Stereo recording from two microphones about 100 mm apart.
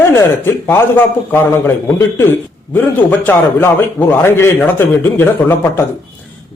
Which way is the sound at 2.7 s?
20° left (ahead or behind).